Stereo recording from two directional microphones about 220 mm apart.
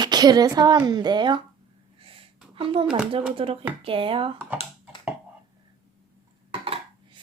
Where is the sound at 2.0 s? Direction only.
25° right (ahead or behind).